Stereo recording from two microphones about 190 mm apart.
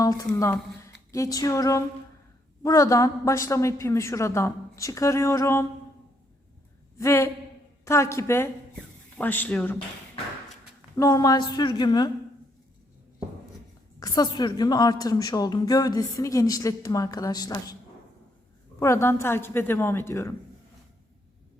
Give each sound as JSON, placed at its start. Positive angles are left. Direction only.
{"t": 0.0, "sound": "a woman's voice", "side_deg": 20}
{"t": 7.0, "sound": "a woman's voice", "side_deg": 15}
{"t": 10.9, "sound": "a woman's voice", "side_deg": 20}
{"t": 14.0, "sound": "a woman's voice", "side_deg": 20}
{"t": 18.8, "sound": "a woman's voice", "side_deg": 15}